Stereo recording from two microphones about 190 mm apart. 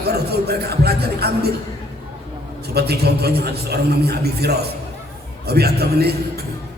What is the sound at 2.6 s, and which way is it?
A man's voice, 55° right (ahead or behind).